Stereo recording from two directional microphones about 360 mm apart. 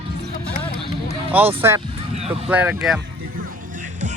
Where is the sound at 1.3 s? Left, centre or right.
Centre.